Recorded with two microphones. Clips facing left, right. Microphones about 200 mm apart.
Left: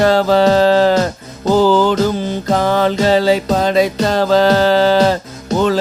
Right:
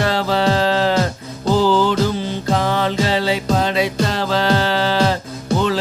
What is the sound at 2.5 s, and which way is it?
Music, 45° left (ahead or behind).